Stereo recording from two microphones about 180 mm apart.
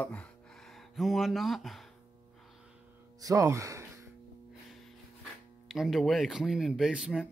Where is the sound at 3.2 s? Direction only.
20° right (ahead or behind).